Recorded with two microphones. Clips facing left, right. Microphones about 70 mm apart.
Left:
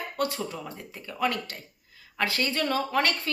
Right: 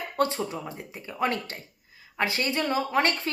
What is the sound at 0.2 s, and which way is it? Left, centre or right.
A woman's voice, right.